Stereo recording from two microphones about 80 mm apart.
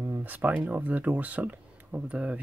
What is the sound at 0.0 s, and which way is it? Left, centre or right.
Speech, right.